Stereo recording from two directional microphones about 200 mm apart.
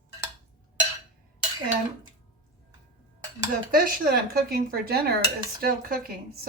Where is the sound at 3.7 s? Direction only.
50° right (ahead or behind).